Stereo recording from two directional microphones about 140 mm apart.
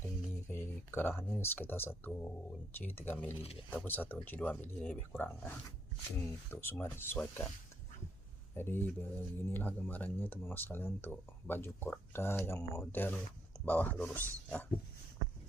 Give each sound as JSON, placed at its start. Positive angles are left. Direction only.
{"t": 0.0, "sound": "a sound", "side_deg": 15}
{"t": 2.7, "sound": "speech", "side_deg": 15}
{"t": 6.5, "sound": "speech", "side_deg": 15}
{"t": 8.5, "sound": "speech", "side_deg": 15}